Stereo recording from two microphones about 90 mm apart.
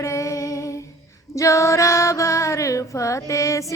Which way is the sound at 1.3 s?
35° left (ahead or behind).